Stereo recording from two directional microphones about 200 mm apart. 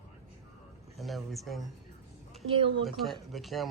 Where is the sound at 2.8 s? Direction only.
Centre (ahead or behind).